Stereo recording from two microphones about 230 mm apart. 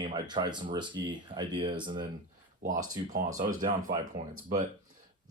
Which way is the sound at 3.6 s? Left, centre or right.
Right.